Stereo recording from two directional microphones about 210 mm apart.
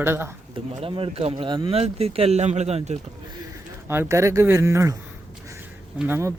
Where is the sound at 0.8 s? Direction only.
25° right (ahead or behind).